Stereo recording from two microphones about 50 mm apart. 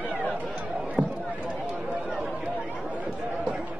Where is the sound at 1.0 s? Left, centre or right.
Right.